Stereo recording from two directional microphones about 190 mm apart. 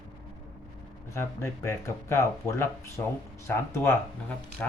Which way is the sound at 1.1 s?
15° left (ahead or behind).